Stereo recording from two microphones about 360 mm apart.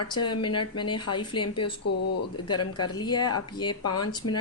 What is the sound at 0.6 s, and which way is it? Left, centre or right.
Speech, left.